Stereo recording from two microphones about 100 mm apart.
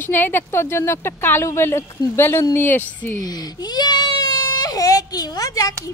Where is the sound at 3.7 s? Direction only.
45° left (ahead or behind).